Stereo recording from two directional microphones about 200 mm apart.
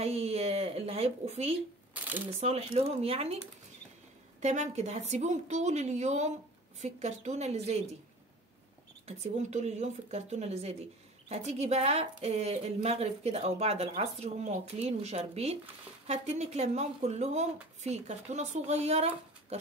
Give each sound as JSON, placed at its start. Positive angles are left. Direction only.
{"t": 0.0, "sound": "a sound", "side_deg": -30}
{"t": 2.4, "sound": "speech", "side_deg": -30}
{"t": 4.4, "sound": "speech", "side_deg": -35}
{"t": 9.0, "sound": "speech", "side_deg": -35}